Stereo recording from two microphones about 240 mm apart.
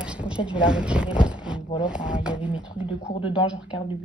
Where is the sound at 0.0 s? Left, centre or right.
Centre.